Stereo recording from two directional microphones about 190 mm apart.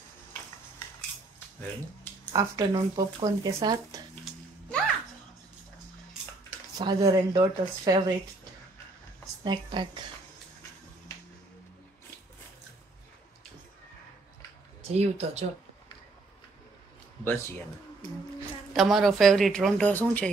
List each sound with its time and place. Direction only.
2.3 s a woman's voice: 20° right (ahead or behind)
4.2 s a sound: centre (ahead or behind)
6.8 s a woman's voice: 20° right (ahead or behind)
9.4 s speech: 25° right (ahead or behind)
14.8 s speech: 35° right (ahead or behind)
18.7 s speech: centre (ahead or behind)